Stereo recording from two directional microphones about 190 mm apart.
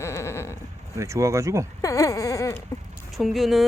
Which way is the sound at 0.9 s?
15° right (ahead or behind).